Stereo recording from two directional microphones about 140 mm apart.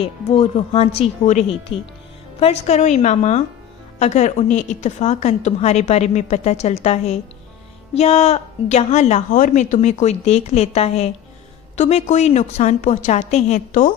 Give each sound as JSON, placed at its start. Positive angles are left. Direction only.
{"t": 0.0, "sound": "a woman's voice", "side_deg": 45}
{"t": 1.7, "sound": "speech", "side_deg": 40}
{"t": 2.4, "sound": "a woman's voice", "side_deg": 50}
{"t": 9.3, "sound": "a woman's voice", "side_deg": 65}